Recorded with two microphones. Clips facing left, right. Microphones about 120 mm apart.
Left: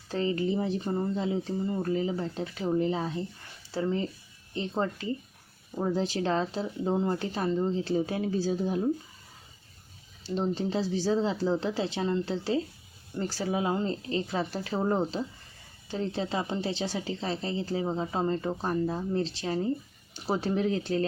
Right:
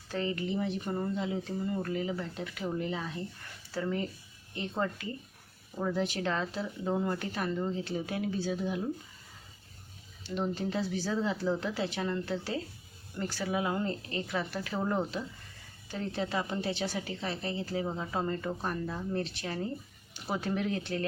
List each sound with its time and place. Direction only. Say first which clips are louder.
0.1 s speech: left 5 dB; 30° left (ahead or behind)
1.1 s speech: left 4 dB; 30° left (ahead or behind)
10.2 s speech: left 4 dB; 30° left (ahead or behind)